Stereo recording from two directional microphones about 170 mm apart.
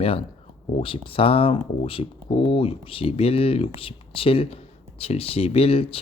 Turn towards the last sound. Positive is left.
turn(degrees=35)  # may be behind; listen again after turning